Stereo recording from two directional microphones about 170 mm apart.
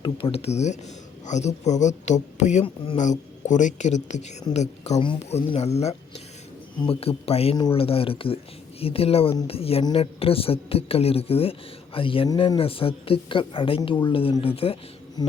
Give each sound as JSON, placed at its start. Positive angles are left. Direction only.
{"t": 0.0, "sound": "a woman's voice", "side_deg": 30}
{"t": 15.2, "sound": "insect", "side_deg": 25}